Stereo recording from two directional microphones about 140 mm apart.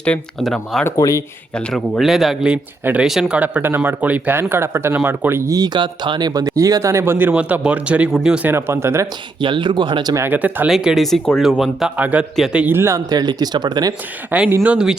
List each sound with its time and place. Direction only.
0.0 s speech: 5° left (ahead or behind)
0.9 s speech: 25° left (ahead or behind)
1.5 s speech: 5° left (ahead or behind); by 9.0 s 20° right (ahead or behind)
9.4 s speech: 35° right (ahead or behind)
10.2 s speech: 10° right (ahead or behind); by 13.9 s 30° right (ahead or behind)
14.3 s speech: 10° right (ahead or behind)